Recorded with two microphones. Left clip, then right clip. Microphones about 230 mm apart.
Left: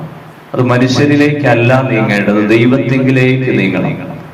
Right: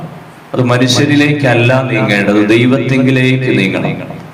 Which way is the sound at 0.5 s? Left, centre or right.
Right.